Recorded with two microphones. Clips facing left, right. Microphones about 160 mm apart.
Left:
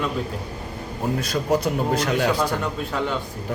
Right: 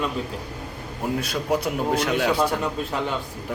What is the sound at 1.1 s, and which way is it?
A man's voice, 5° right (ahead or behind).